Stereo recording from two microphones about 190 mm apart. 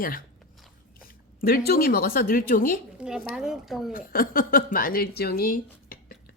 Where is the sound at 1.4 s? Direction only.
50° left (ahead or behind).